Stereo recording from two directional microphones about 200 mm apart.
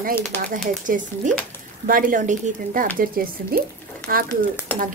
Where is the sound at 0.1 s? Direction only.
10° left (ahead or behind).